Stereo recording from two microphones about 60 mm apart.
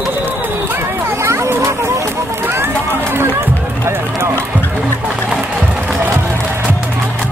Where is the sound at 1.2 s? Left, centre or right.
Right.